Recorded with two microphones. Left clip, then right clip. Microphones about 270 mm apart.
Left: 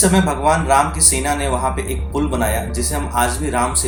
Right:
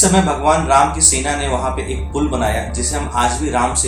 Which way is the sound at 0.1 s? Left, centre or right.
Left.